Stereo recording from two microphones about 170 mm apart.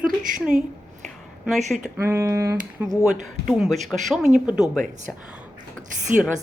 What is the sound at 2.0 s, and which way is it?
Speech, 15° right (ahead or behind).